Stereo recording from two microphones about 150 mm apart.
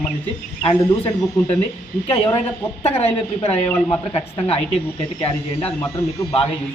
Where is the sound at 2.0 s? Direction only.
40° left (ahead or behind).